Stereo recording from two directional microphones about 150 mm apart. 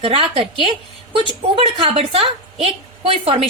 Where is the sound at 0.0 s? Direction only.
35° right (ahead or behind).